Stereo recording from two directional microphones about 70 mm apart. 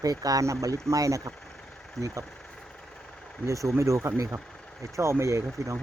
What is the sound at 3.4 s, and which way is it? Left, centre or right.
Speech, right.